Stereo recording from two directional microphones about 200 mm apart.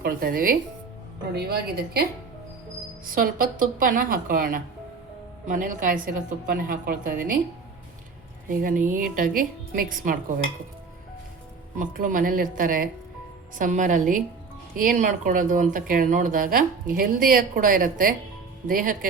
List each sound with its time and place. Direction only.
0.0 s speech: 50° right (ahead or behind)
3.1 s speech: 45° right (ahead or behind)
8.4 s speech: 45° right (ahead or behind)
11.8 s a woman's voice: 40° right (ahead or behind)